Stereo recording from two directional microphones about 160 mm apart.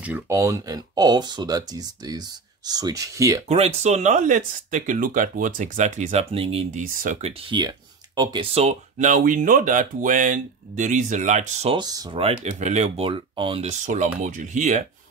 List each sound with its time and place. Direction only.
0.3 s speech: 20° right (ahead or behind)
3.4 s speech: 40° right (ahead or behind)
7.0 s speech: 50° right (ahead or behind)
8.2 s speech: 30° right (ahead or behind); by 11.7 s 45° right (ahead or behind)
11.7 s speech: 25° right (ahead or behind)
12.2 s speech: 40° right (ahead or behind)